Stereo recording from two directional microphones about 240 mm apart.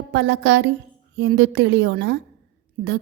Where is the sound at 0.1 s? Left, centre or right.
Right.